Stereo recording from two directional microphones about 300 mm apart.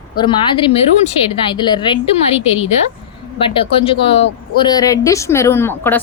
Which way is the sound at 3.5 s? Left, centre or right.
Centre.